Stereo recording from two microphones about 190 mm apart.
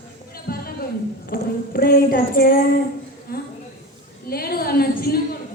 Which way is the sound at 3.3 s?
50° left (ahead or behind).